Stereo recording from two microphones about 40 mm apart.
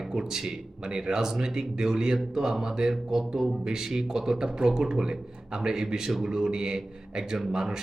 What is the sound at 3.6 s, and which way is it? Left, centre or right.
A man's voice, centre.